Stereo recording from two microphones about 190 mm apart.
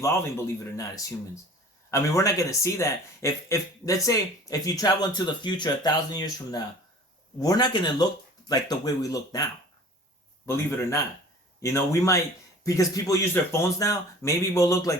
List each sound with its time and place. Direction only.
0.0 s speech: 15° left (ahead or behind)